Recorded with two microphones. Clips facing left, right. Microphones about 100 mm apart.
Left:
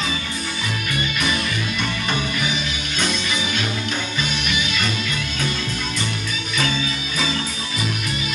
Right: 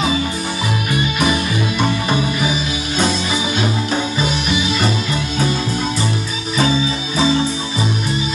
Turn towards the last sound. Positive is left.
turn(degrees=-30)  # may be behind; listen again after turning